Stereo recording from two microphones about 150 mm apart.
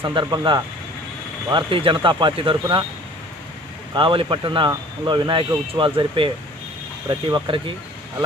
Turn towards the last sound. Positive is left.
turn(degrees=-30)  # may be behind; listen again after turning